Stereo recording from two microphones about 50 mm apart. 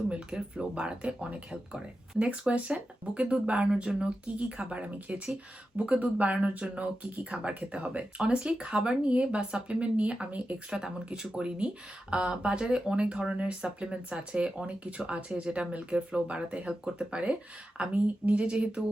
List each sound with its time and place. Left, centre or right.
0.1 s speech: centre
10.7 s speech: centre